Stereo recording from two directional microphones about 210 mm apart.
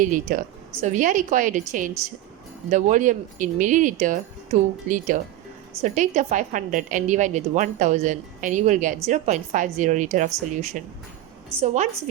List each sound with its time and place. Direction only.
0.0 s a woman's voice: 40° right (ahead or behind)